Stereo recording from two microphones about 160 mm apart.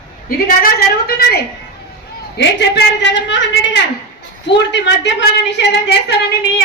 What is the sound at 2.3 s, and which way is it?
A woman's voice, 90° left.